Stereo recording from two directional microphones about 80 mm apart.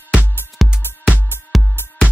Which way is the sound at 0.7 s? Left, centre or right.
Centre.